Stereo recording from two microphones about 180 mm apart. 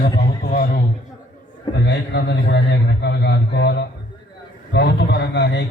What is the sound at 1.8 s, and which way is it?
A man's voice, 70° left (ahead or behind).